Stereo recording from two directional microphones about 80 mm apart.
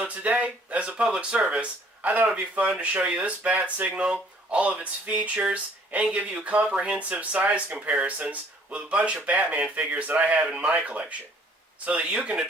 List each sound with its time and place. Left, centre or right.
0.0 s speech: centre